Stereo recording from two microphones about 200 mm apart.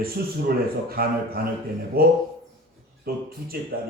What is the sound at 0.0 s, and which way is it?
A man's voice, 50° right (ahead or behind).